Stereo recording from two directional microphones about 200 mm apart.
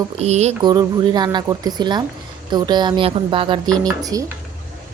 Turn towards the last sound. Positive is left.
turn(degrees=-15)  # may be behind; listen again after turning